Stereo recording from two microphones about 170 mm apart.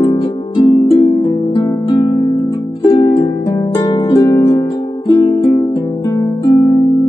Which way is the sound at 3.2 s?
20° left (ahead or behind).